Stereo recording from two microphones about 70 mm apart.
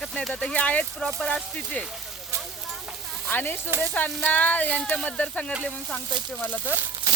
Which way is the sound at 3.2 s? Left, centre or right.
Left.